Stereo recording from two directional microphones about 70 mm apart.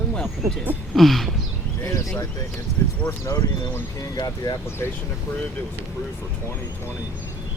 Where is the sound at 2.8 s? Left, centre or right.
Left.